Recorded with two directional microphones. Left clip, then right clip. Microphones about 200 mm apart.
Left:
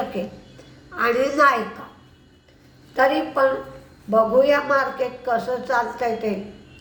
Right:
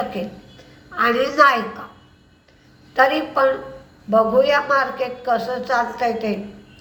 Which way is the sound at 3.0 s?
10° left (ahead or behind).